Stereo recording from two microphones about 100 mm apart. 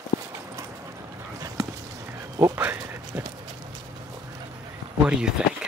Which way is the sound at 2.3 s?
30° right (ahead or behind).